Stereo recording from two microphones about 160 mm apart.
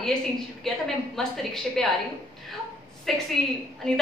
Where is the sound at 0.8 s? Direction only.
Centre (ahead or behind).